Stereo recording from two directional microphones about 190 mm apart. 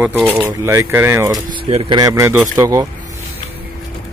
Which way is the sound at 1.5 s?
30° right (ahead or behind).